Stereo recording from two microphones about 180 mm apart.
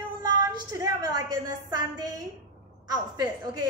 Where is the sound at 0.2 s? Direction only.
20° right (ahead or behind).